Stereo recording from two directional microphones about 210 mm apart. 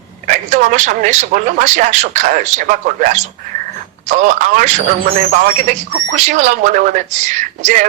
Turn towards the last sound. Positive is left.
turn(degrees=-35)  # may be behind; listen again after turning